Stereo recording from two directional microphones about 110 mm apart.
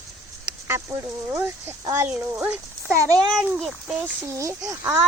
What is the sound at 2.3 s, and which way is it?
Speech, 10° right (ahead or behind).